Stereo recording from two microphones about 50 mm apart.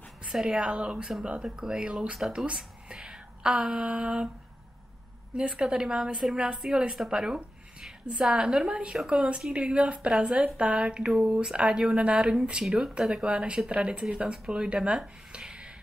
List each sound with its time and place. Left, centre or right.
0.3 s a woman's voice: centre
0.6 s speech: right
5.3 s speech: right